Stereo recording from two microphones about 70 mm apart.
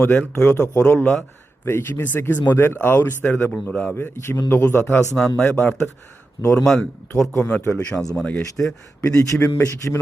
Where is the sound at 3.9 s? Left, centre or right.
Left.